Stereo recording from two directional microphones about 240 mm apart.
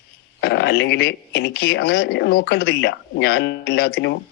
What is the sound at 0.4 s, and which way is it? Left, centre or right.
Speech, left.